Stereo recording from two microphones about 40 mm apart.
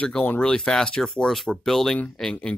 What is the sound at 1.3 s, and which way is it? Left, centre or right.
Speech, centre.